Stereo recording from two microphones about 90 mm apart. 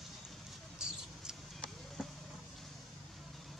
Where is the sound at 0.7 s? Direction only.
5° right (ahead or behind).